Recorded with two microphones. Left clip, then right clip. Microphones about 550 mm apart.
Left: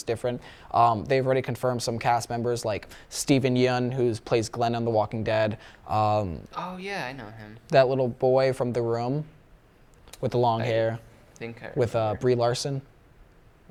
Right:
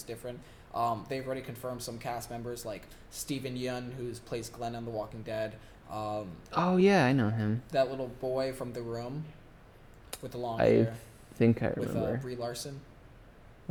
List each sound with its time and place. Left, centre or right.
0.0 s speech: left
6.4 s speech: right
7.7 s speech: left
10.2 s speech: left
11.3 s speech: right
11.8 s speech: left